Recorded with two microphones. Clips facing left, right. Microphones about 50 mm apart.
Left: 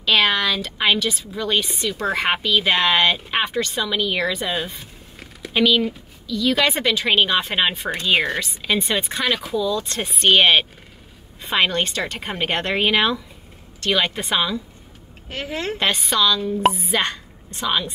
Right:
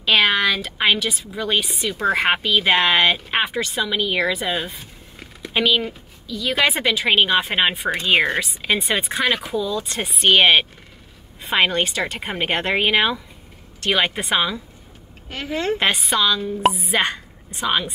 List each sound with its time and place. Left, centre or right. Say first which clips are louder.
0.0 s a woman's voice: right 1 dB; centre
15.2 s a woman's voice: right 3 dB; centre
16.0 s a woman's voice: even; centre
16.6 s a woman's voice: right 1 dB; centre
16.9 s a woman's voice: right 1 dB; centre